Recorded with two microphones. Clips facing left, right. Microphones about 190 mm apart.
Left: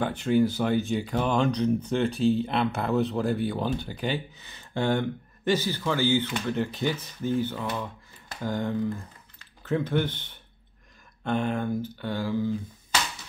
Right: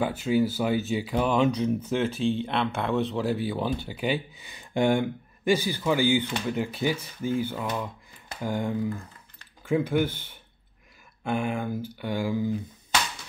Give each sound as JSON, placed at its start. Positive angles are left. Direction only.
{"t": 0.0, "sound": "speech", "side_deg": -5}